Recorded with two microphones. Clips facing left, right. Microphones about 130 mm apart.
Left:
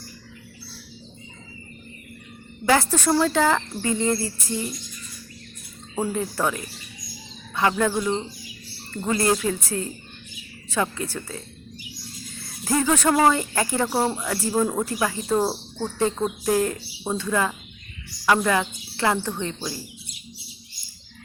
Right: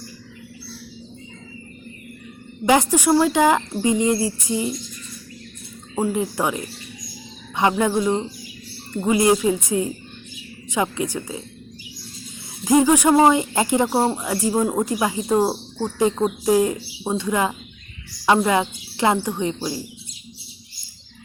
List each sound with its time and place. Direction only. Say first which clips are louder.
2.6 s speech: right 4 dB; 15° right (ahead or behind)
6.0 s speech: right 3 dB; 15° right (ahead or behind)
12.6 s speech: right 6 dB; 15° right (ahead or behind)